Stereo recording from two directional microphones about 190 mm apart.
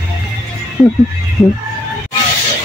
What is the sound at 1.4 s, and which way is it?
Speech, 10° left (ahead or behind).